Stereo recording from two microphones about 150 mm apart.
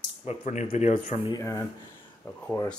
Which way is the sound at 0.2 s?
45° left (ahead or behind).